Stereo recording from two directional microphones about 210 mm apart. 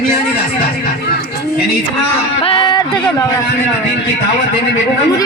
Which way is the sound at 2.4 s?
25° left (ahead or behind).